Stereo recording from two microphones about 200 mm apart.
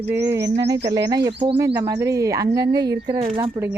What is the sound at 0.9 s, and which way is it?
Speech, 15° right (ahead or behind).